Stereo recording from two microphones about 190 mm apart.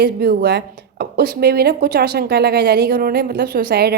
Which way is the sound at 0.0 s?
60° right (ahead or behind).